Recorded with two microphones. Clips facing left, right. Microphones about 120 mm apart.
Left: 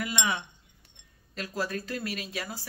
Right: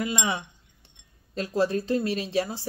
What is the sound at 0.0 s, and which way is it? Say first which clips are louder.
Speech: right 3 dB; 25° right (ahead or behind).